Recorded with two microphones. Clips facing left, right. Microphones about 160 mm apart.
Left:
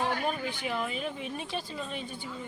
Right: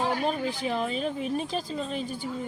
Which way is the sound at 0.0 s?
30° right (ahead or behind).